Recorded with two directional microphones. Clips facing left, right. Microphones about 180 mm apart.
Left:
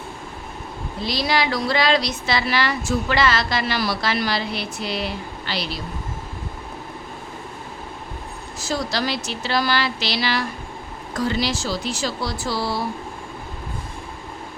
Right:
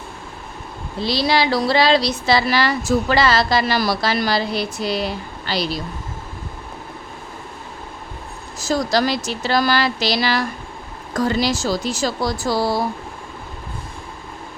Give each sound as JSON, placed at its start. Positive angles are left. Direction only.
{"t": 1.0, "sound": "a woman's voice", "side_deg": -30}
{"t": 8.5, "sound": "speech", "side_deg": -45}